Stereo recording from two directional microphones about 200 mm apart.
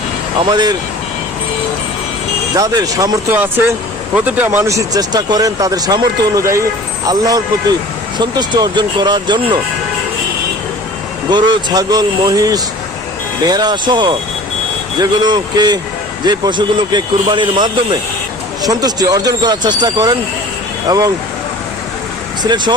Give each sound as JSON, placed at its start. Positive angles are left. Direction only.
{"t": 0.5, "sound": "speech", "side_deg": -20}
{"t": 2.6, "sound": "speech", "side_deg": -15}
{"t": 11.3, "sound": "speech", "side_deg": -20}
{"t": 22.4, "sound": "speech", "side_deg": -20}